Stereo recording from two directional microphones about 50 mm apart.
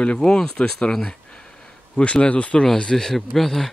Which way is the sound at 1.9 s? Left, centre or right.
Left.